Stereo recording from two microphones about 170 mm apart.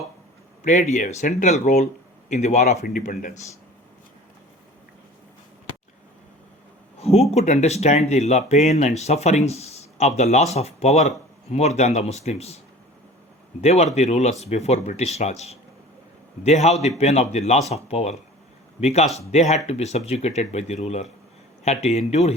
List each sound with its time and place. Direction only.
0.6 s speech: 45° left (ahead or behind)
7.0 s speech: 35° left (ahead or behind)
13.6 s speech: 40° left (ahead or behind)